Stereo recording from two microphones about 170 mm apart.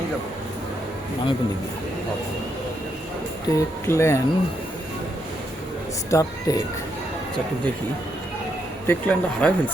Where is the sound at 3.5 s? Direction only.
15° left (ahead or behind).